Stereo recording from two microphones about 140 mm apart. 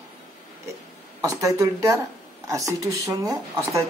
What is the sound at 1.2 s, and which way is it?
Speech, 25° right (ahead or behind).